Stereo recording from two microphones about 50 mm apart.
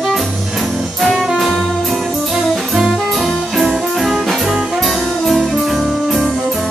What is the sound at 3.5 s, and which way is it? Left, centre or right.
Music, centre.